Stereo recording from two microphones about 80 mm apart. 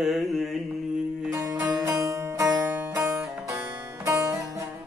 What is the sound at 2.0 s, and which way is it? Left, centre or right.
Music, right.